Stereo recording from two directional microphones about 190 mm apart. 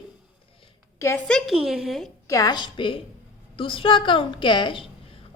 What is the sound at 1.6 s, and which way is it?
Speech, centre (ahead or behind).